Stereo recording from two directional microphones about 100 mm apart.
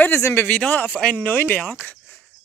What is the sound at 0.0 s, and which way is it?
Speech, 25° left (ahead or behind).